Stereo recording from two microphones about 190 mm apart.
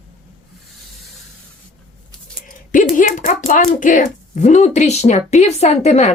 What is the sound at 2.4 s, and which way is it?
Speech, 45° left (ahead or behind).